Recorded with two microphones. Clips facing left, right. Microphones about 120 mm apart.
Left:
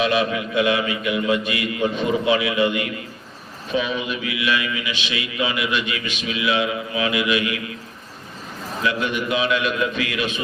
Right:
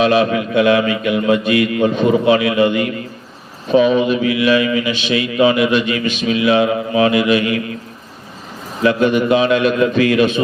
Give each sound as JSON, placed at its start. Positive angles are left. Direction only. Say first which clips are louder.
{"t": 0.0, "sound": "a man's voice", "louder": "right 7 dB", "side_deg": -40}
{"t": 8.8, "sound": "a man's voice", "louder": "right 10 dB", "side_deg": -40}